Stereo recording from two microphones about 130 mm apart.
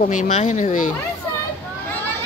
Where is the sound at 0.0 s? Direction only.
70° left (ahead or behind).